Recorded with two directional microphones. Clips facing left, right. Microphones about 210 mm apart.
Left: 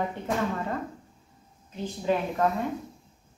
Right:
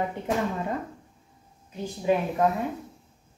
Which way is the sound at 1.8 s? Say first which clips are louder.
Right 2 dB; 10° right (ahead or behind).